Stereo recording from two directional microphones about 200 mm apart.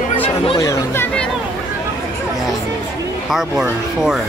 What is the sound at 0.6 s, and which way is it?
Speech, 15° left (ahead or behind).